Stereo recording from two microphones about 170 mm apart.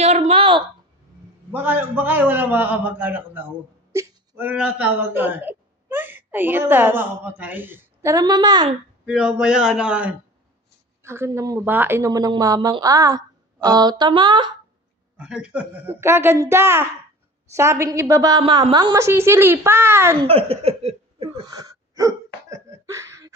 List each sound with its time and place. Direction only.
0.0 s a sound: 40° right (ahead or behind)
1.5 s a woman's voice: 10° right (ahead or behind)
9.0 s a man's voice: 5° right (ahead or behind); by 14.5 s 30° right (ahead or behind)
15.1 s a woman's voice: 5° right (ahead or behind)
20.2 s a sound: 35° right (ahead or behind)
21.3 s hiccup: 25° right (ahead or behind)